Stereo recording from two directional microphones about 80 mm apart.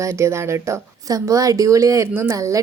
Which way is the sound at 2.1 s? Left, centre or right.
Right.